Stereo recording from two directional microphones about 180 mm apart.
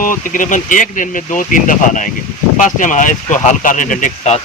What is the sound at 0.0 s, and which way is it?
Speech, 50° left (ahead or behind).